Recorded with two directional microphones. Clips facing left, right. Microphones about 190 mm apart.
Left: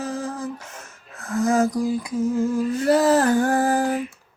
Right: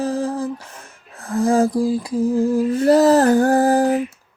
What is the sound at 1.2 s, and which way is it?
Humming, 30° right (ahead or behind).